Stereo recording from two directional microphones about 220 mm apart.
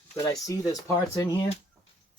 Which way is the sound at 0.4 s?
15° left (ahead or behind).